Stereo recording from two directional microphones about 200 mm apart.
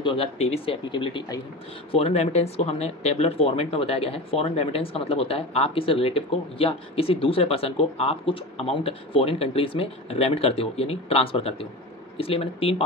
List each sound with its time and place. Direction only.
0.0 s speech: 25° left (ahead or behind)